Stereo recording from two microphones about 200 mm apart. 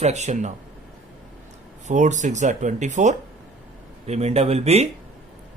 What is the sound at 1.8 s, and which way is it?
Speech, 35° right (ahead or behind).